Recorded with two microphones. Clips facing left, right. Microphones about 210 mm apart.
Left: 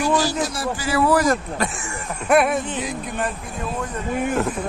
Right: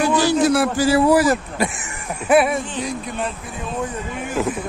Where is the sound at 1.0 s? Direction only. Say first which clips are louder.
Right 3 dB; 10° right (ahead or behind).